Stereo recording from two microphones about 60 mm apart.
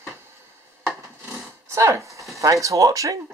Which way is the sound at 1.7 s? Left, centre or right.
Right.